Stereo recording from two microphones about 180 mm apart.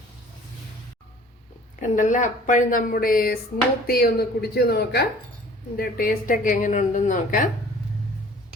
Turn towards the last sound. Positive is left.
turn(degrees=45)  # may be behind; listen again after turning